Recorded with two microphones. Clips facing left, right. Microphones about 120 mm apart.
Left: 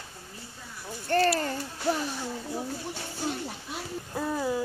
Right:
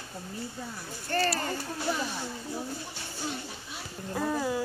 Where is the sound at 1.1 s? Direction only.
55° left (ahead or behind).